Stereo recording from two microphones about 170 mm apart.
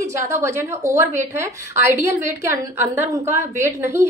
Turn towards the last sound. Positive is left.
turn(degrees=-15)  # may be behind; listen again after turning